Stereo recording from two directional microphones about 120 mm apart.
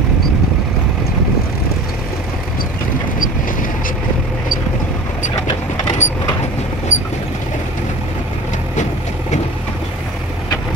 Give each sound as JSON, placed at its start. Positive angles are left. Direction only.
{"t": 6.0, "sound": "vehicle", "side_deg": 80}